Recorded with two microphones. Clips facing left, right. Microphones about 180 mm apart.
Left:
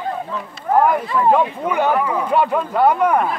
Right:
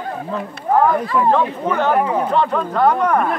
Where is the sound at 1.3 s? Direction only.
10° left (ahead or behind).